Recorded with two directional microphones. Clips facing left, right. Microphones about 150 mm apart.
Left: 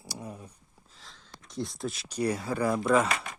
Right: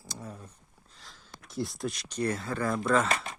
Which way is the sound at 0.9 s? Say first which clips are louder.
Even; centre (ahead or behind).